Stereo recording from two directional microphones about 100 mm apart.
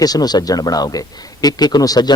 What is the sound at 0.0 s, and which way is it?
Speech, 40° left (ahead or behind).